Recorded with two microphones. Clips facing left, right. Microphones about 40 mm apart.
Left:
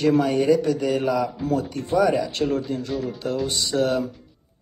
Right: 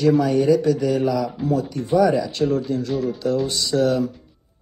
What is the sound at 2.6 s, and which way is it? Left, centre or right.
Speech, left.